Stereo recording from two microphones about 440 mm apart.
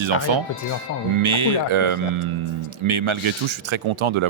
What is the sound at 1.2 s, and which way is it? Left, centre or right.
Speech, right.